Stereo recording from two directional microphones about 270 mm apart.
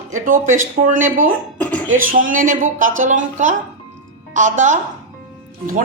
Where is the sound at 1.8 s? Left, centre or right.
Right.